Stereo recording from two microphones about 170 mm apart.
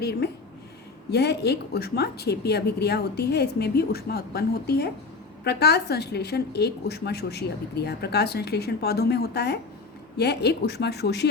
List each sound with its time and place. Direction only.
0.0 s a woman's voice: 70° left (ahead or behind)